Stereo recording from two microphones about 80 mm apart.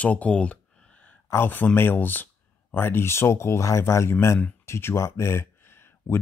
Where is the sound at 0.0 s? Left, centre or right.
Centre.